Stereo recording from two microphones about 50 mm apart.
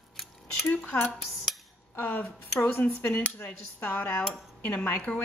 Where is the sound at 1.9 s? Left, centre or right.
Left.